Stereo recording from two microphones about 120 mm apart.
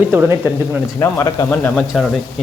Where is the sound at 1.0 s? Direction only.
30° left (ahead or behind).